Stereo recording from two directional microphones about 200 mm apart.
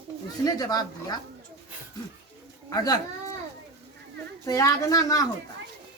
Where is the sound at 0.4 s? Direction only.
20° left (ahead or behind).